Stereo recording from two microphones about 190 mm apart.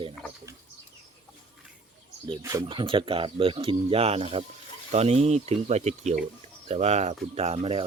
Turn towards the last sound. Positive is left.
turn(degrees=-30)  # may be behind; listen again after turning